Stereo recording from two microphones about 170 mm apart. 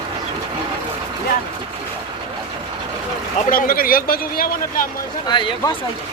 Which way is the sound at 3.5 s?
60° left (ahead or behind).